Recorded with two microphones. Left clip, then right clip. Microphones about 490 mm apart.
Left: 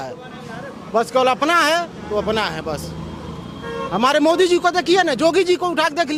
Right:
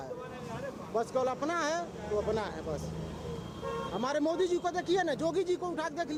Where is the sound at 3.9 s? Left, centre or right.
Left.